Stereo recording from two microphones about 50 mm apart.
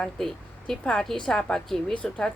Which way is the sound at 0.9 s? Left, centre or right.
Centre.